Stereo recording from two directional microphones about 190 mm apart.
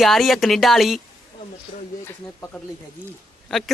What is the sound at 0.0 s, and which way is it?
A man's voice, centre (ahead or behind).